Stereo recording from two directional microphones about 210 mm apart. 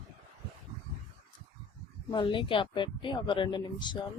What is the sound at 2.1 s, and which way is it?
Speech, 25° left (ahead or behind).